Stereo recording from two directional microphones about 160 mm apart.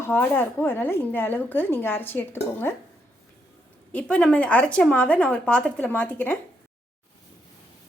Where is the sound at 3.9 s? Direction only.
5° left (ahead or behind).